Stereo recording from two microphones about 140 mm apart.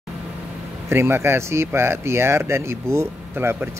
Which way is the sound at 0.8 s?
15° right (ahead or behind).